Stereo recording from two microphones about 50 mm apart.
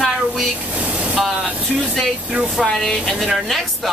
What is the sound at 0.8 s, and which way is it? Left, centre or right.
Vehicle, right.